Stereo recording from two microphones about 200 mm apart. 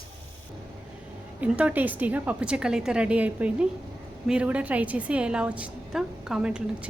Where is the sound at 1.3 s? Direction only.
5° right (ahead or behind).